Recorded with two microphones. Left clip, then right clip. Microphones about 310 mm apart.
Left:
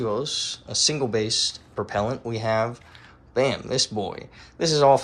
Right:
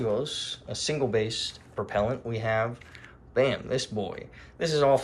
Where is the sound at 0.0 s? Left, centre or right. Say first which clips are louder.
Left 3 dB; centre.